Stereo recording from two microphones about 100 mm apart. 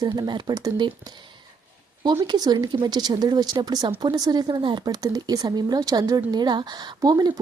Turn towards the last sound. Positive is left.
turn(degrees=-40)  # may be behind; listen again after turning